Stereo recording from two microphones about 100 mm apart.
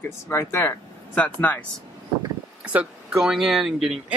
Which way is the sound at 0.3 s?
30° left (ahead or behind).